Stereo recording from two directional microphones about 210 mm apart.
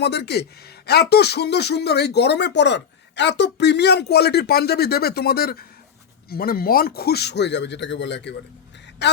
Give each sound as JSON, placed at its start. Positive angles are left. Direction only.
{"t": 0.0, "sound": "speech", "side_deg": 55}